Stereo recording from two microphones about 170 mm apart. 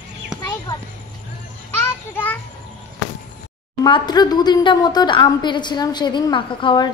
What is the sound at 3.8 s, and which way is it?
A woman's voice, 25° left (ahead or behind).